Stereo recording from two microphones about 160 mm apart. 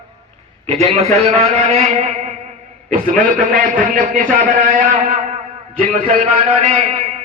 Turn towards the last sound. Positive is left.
turn(degrees=-40)  # may be behind; listen again after turning